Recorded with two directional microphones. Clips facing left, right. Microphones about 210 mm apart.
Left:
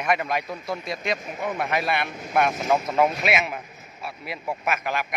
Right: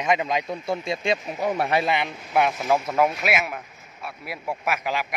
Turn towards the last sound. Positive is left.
turn(degrees=-10)  # may be behind; listen again after turning